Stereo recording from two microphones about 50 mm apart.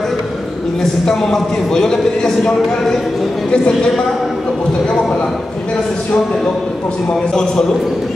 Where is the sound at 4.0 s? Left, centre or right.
Centre.